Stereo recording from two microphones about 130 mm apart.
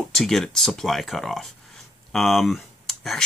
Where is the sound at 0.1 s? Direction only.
5° left (ahead or behind).